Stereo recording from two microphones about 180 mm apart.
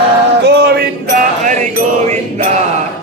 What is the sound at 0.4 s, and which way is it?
Male singing, 65° right (ahead or behind).